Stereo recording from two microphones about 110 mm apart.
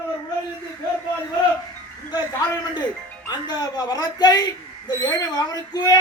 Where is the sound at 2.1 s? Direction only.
40° left (ahead or behind).